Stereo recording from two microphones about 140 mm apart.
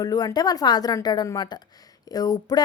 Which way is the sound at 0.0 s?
25° left (ahead or behind).